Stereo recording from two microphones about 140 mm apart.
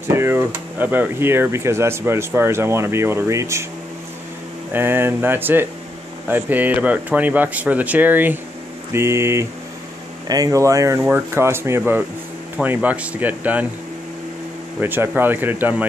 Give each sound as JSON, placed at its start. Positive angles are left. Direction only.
{"t": 0.1, "sound": "speech", "side_deg": -15}
{"t": 4.7, "sound": "speech", "side_deg": -15}
{"t": 14.8, "sound": "speech", "side_deg": -15}